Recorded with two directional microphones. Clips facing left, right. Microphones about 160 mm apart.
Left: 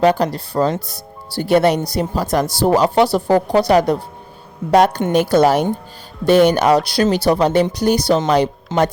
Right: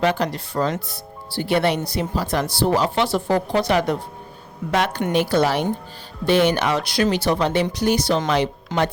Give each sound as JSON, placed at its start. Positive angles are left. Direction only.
{"t": 0.0, "sound": "a woman's voice", "side_deg": 35}